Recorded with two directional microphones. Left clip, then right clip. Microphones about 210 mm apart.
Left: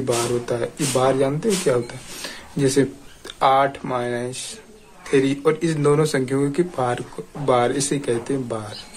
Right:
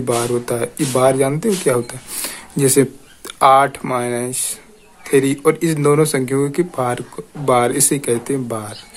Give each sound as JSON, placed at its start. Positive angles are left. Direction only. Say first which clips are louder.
{"t": 0.0, "sound": "speech", "louder": "right 3 dB", "side_deg": -30}